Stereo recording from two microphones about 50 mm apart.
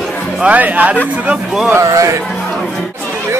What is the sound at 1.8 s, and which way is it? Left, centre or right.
Speech, right.